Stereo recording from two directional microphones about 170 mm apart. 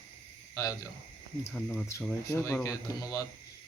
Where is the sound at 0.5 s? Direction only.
20° left (ahead or behind).